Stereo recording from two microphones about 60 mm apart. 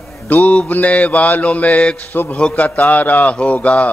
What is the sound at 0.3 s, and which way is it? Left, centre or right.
A man's voice, left.